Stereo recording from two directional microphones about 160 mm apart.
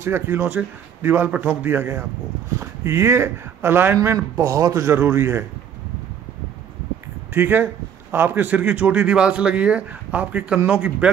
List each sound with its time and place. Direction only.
0.0 s speech: 15° right (ahead or behind)
7.3 s speech: 10° right (ahead or behind)